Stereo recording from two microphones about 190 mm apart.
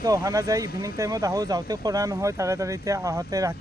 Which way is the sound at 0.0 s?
20° right (ahead or behind).